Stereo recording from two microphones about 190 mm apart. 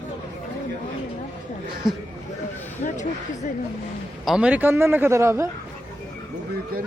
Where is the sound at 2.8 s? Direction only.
45° left (ahead or behind).